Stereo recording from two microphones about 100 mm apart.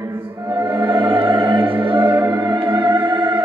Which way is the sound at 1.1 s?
55° right (ahead or behind).